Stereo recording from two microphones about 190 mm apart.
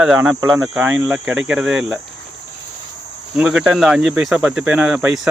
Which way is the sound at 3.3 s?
5° right (ahead or behind).